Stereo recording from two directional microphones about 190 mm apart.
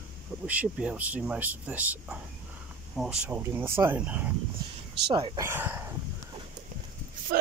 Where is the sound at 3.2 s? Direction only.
10° right (ahead or behind).